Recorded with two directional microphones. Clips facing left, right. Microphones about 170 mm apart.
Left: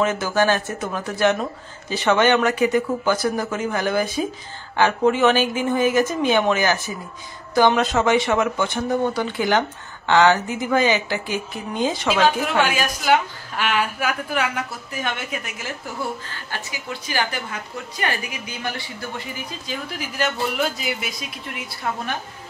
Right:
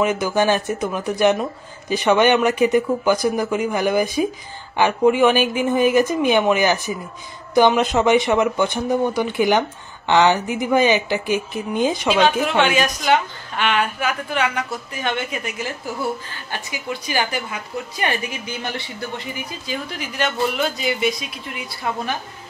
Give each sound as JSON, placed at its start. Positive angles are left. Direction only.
{"t": 0.0, "sound": "speech", "side_deg": -15}
{"t": 12.2, "sound": "a woman's voice", "side_deg": 0}
{"t": 17.1, "sound": "speech", "side_deg": -15}
{"t": 18.0, "sound": "a woman's voice", "side_deg": -25}
{"t": 19.7, "sound": "a woman's voice", "side_deg": 5}